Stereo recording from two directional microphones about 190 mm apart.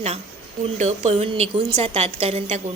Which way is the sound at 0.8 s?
35° right (ahead or behind).